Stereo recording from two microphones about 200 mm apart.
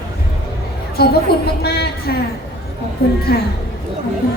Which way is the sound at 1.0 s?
50° left (ahead or behind).